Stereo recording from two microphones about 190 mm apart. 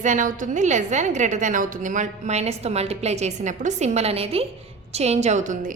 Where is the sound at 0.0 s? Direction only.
40° right (ahead or behind).